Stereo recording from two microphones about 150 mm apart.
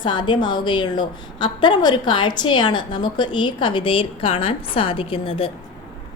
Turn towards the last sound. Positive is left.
turn(degrees=35)  # may be behind; listen again after turning